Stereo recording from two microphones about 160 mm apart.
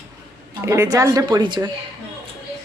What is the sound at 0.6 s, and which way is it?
Speech, 15° right (ahead or behind).